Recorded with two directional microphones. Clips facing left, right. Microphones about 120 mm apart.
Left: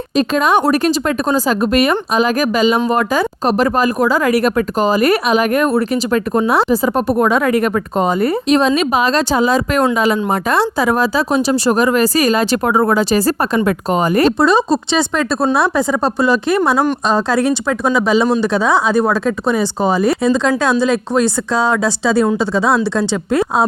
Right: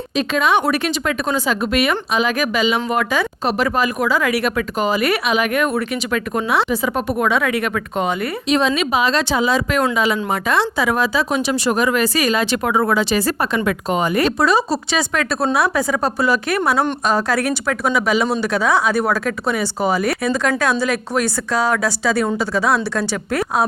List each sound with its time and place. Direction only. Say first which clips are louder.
0.2 s speech: left 4 dB; 40° left (ahead or behind)
14.3 s speech: left 4 dB; 25° left (ahead or behind)